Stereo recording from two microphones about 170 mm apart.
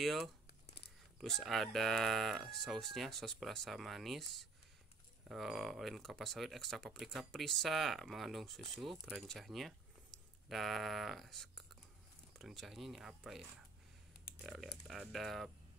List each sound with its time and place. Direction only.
0.0 s speech: centre (ahead or behind)